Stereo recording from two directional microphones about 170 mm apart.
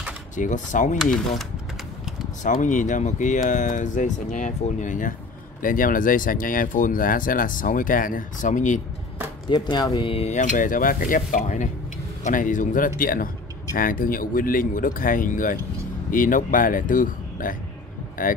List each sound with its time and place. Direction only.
0.4 s speech: 45° left (ahead or behind)
2.4 s speech: 50° left (ahead or behind)
9.5 s speech: 25° left (ahead or behind); by 18.3 s 50° left (ahead or behind)